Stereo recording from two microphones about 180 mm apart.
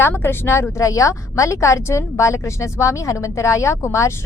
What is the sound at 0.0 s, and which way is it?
A woman's voice, 10° left (ahead or behind).